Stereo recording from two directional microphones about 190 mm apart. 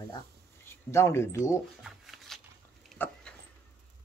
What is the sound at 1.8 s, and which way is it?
Shuffling cards, centre (ahead or behind).